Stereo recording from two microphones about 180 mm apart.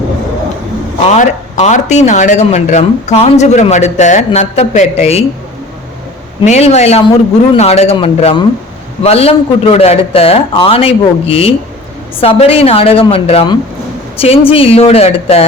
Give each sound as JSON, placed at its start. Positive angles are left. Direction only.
{"t": 1.1, "sound": "speech", "side_deg": 40}
{"t": 6.4, "sound": "speech", "side_deg": 40}